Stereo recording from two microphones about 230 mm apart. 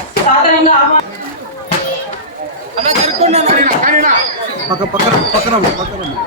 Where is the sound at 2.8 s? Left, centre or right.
Right.